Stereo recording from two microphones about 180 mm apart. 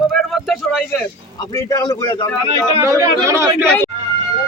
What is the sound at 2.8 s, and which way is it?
Speech, 15° right (ahead or behind).